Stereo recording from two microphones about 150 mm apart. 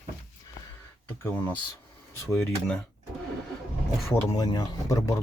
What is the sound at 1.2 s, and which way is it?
Speech, 15° left (ahead or behind).